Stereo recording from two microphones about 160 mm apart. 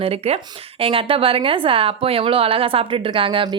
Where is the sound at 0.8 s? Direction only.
35° right (ahead or behind).